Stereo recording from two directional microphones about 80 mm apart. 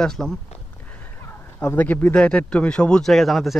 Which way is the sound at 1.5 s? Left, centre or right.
Centre.